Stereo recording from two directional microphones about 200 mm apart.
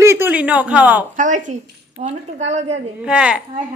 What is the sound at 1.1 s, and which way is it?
A woman's voice, 40° right (ahead or behind).